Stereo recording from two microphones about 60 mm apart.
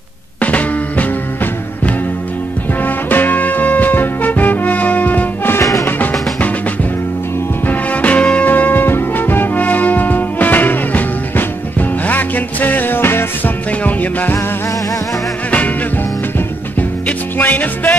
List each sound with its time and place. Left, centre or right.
0.4 s music: left
5.6 s music: left
7.6 s music: left
13.7 s music: left
17.4 s music: left